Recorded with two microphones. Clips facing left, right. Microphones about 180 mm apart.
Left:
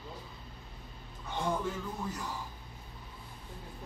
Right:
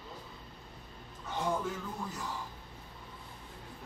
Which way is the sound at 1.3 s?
5° right (ahead or behind).